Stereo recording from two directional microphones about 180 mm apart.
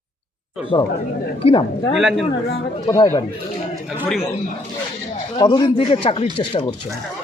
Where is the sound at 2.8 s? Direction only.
15° left (ahead or behind).